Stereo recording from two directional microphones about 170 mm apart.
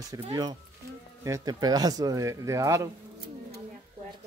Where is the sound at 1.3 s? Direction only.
20° right (ahead or behind).